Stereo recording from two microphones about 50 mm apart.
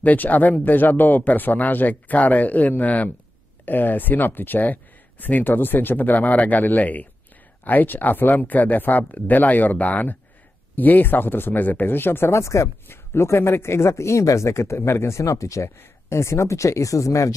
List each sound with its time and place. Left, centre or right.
0.0 s speech: left
12.3 s speech: left
12.8 s speech: left
15.8 s speech: left